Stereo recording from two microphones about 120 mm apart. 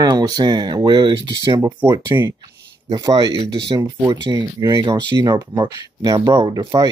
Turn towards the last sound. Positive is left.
turn(degrees=-30)  # may be behind; listen again after turning